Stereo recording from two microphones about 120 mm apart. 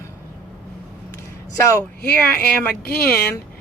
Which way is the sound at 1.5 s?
25° left (ahead or behind).